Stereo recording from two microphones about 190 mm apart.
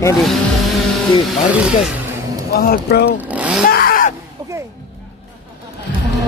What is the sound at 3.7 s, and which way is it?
Groan, 50° left (ahead or behind).